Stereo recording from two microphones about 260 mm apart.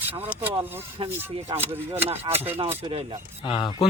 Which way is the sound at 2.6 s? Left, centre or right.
Centre.